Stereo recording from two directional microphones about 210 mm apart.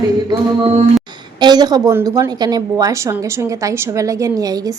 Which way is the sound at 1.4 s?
20° right (ahead or behind).